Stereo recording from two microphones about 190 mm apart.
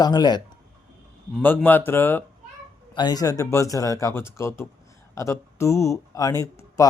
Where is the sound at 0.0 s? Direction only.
20° left (ahead or behind).